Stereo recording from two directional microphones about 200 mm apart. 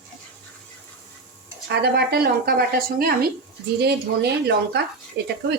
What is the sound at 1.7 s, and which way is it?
Speech, 55° right (ahead or behind).